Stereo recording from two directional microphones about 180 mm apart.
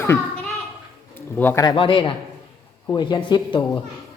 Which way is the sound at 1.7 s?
30° left (ahead or behind).